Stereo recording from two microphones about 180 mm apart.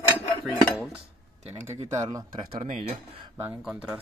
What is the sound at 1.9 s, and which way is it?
Speech, 20° right (ahead or behind).